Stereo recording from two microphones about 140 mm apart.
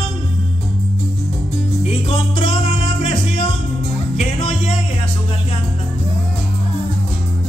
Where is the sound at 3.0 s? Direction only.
50° left (ahead or behind).